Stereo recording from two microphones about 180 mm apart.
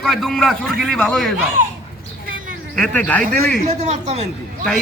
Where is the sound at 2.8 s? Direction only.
10° left (ahead or behind).